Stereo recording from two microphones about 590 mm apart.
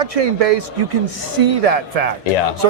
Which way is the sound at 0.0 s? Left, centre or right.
Right.